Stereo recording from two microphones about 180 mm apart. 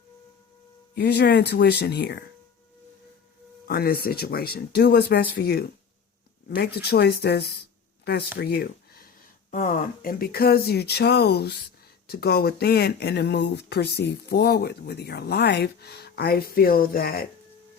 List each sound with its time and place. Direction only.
0.9 s speech: 65° left (ahead or behind)
3.7 s speech: 60° left (ahead or behind)
9.5 s speech: 50° left (ahead or behind)